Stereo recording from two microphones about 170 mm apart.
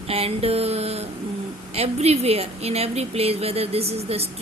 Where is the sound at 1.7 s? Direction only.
35° right (ahead or behind).